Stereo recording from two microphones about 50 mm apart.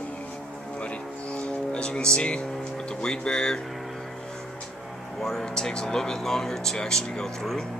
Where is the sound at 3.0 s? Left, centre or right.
Centre.